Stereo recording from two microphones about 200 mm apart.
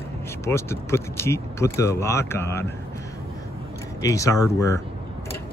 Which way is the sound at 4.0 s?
15° left (ahead or behind).